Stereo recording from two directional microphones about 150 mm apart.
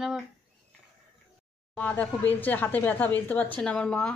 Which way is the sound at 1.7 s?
10° left (ahead or behind).